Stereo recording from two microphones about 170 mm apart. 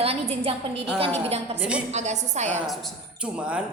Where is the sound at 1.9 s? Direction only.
40° right (ahead or behind).